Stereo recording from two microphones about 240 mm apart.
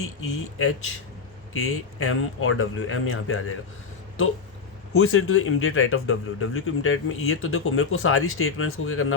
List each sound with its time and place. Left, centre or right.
0.0 s speech: left